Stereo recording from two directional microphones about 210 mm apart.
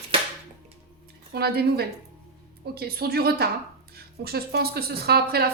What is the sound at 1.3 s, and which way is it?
A woman's voice, 50° right (ahead or behind).